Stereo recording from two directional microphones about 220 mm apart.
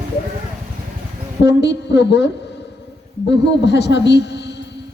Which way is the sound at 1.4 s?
50° left (ahead or behind).